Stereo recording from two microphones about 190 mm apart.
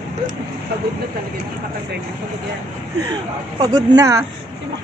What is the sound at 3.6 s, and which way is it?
Speech, 20° right (ahead or behind).